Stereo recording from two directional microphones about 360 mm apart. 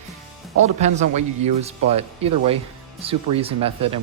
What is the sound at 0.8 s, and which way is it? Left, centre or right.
Speech, centre.